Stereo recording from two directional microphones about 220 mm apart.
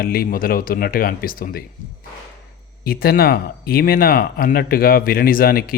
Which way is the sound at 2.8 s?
45° left (ahead or behind).